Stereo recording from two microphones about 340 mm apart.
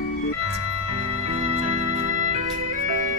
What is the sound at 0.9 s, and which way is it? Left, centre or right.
Music, centre.